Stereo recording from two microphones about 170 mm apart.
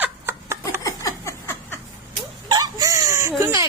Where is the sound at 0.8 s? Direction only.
15° left (ahead or behind).